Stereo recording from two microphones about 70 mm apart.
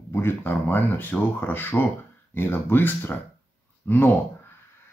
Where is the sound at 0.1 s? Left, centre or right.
Left.